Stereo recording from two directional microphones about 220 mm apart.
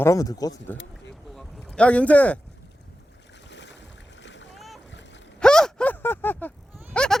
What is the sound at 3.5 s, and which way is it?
Boat, 55° left (ahead or behind).